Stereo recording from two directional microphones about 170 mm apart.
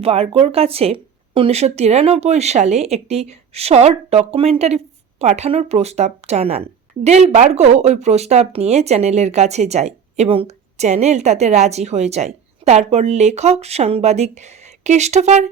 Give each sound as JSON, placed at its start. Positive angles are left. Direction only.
{"t": 0.0, "sound": "speech", "side_deg": -35}